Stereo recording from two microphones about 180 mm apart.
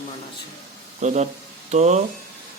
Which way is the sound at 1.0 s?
40° right (ahead or behind).